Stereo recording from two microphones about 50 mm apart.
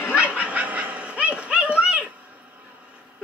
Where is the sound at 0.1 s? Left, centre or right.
Right.